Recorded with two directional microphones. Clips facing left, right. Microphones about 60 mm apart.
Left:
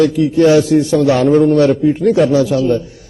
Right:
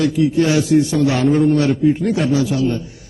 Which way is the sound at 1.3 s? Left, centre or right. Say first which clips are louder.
Left 5 dB; left.